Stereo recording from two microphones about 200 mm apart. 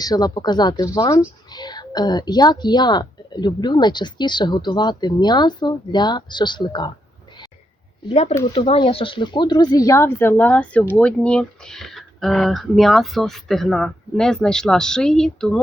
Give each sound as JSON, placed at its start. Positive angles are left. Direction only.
{"t": 0.0, "sound": "speech", "side_deg": 20}
{"t": 8.1, "sound": "speech", "side_deg": 35}